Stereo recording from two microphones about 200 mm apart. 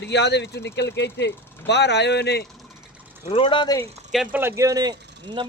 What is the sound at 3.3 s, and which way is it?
Speech, 25° left (ahead or behind).